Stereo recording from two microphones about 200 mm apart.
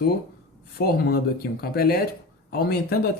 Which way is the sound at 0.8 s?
50° left (ahead or behind).